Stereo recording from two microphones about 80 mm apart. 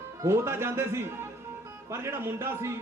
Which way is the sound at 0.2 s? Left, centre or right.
Right.